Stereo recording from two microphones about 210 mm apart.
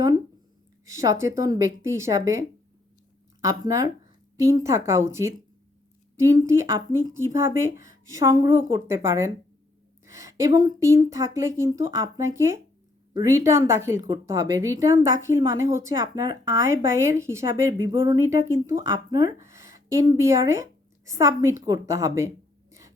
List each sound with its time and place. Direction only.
0.9 s a woman's voice: 15° right (ahead or behind)
3.4 s a woman's voice: 15° right (ahead or behind)